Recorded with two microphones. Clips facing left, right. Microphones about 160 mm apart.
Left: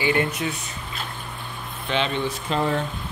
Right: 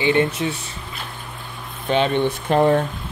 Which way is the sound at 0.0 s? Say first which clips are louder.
Right 4 dB; 25° right (ahead or behind).